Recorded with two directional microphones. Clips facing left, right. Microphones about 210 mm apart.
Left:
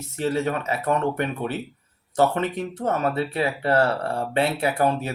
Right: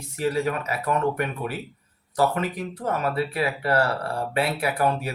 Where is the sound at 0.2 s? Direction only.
25° left (ahead or behind).